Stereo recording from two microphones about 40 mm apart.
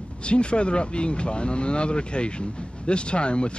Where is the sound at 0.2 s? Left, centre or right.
Left.